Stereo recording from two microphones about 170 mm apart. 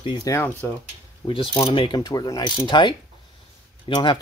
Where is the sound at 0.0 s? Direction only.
30° left (ahead or behind).